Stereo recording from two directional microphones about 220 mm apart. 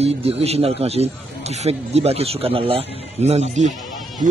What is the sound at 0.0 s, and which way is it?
A man's voice, 25° right (ahead or behind).